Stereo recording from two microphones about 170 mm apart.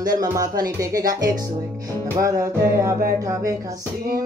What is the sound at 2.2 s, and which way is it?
Speech, 20° right (ahead or behind).